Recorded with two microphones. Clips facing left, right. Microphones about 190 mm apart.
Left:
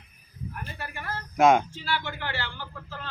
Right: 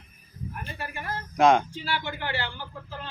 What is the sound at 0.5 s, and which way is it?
Speech, 15° right (ahead or behind).